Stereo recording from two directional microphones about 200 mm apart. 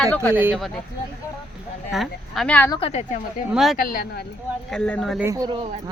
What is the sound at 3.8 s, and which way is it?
Speech, 45° left (ahead or behind).